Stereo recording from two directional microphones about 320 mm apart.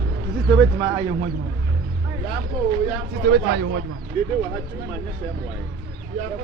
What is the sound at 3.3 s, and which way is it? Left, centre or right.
Speech, right.